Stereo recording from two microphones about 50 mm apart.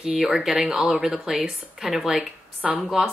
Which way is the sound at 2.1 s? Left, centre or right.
Right.